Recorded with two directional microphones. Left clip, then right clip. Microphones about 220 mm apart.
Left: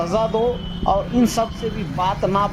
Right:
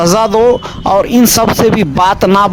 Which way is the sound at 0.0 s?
50° right (ahead or behind).